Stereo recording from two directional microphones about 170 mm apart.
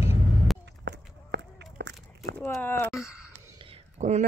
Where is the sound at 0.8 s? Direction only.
90° right.